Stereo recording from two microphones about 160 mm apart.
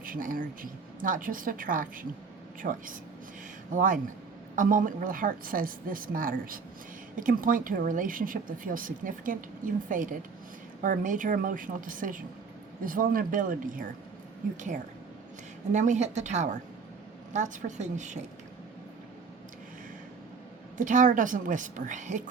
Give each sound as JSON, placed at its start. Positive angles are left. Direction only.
{"t": 0.0, "sound": "a woman's voice", "side_deg": -60}
{"t": 15.7, "sound": "a woman's voice", "side_deg": -50}
{"t": 20.7, "sound": "a woman's voice", "side_deg": -55}